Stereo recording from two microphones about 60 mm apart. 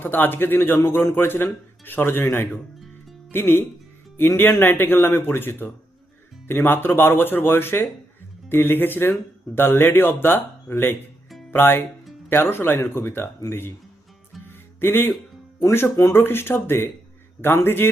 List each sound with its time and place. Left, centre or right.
0.0 s speech: left
14.8 s speech: left